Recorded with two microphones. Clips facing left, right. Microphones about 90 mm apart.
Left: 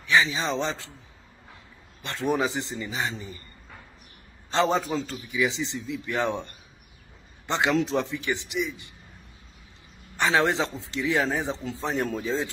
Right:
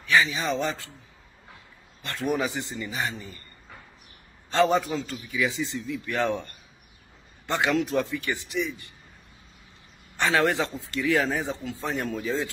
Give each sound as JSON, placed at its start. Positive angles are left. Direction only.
{"t": 0.0, "sound": "speech", "side_deg": 20}
{"t": 2.0, "sound": "speech", "side_deg": 25}
{"t": 4.5, "sound": "a man's voice", "side_deg": 25}
{"t": 5.3, "sound": "speech", "side_deg": 20}
{"t": 10.1, "sound": "speech", "side_deg": 20}